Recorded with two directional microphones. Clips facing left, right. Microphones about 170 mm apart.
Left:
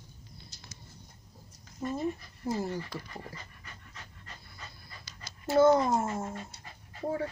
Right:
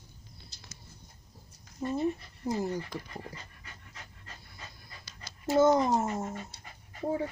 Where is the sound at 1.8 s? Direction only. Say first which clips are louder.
Right 2 dB; 25° right (ahead or behind).